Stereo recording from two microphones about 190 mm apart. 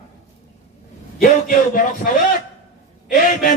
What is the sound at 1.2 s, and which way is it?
A man's voice, 45° left (ahead or behind).